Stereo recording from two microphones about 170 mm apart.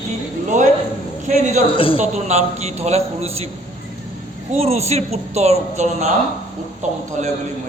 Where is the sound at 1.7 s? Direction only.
30° left (ahead or behind).